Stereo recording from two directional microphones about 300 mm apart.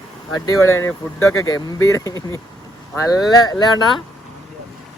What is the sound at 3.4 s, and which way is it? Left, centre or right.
Speech, centre.